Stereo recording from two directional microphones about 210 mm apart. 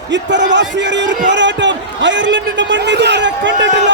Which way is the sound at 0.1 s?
60° right (ahead or behind).